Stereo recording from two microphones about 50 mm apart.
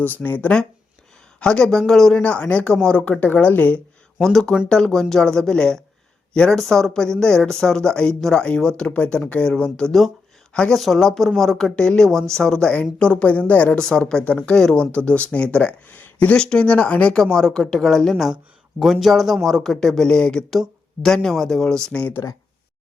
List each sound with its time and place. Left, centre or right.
0.0 s speech: left
1.4 s speech: centre
2.2 s a woman's voice: left
4.2 s a woman's voice: centre
10.7 s a woman's voice: centre; by 13.7 s left
13.7 s speech: centre
14.3 s a woman's voice: left
14.5 s speech: centre
14.9 s a woman's voice: left
16.0 s a sound: left
16.4 s a woman's voice: centre
18.8 s a man's voice: centre
20.5 s speech: centre
22.2 s speech: left